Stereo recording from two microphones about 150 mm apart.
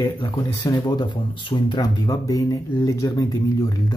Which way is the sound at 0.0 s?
25° left (ahead or behind).